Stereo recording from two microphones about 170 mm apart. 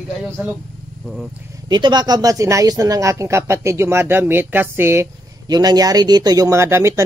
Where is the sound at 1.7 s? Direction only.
25° right (ahead or behind).